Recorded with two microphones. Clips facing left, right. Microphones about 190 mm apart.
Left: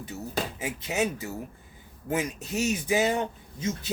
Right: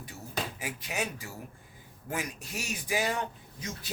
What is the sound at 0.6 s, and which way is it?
Speech, 25° left (ahead or behind).